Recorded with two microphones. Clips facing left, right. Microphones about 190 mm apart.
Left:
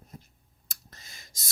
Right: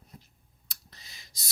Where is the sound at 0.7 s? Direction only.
45° left (ahead or behind).